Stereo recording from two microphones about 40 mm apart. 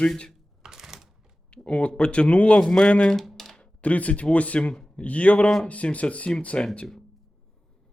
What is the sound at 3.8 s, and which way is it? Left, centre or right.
Speech, left.